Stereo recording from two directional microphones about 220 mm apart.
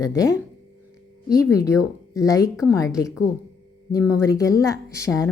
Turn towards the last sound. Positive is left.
turn(degrees=15)  # may be behind; listen again after turning